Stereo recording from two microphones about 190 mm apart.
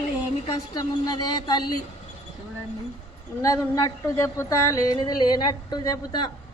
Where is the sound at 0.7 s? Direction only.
20° left (ahead or behind).